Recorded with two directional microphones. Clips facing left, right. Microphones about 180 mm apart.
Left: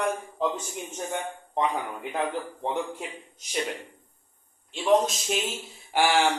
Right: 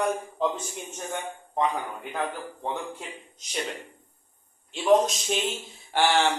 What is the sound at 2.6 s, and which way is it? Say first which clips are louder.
Speech: left 2 dB; 15° left (ahead or behind).